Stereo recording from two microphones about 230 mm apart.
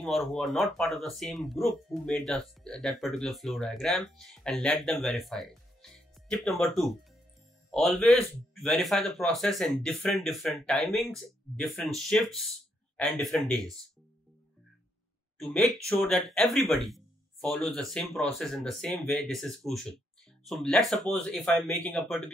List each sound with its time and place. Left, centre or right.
0.0 s speech: centre
15.3 s speech: centre